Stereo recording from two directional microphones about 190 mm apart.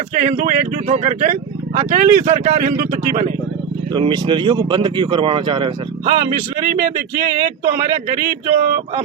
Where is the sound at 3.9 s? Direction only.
25° right (ahead or behind).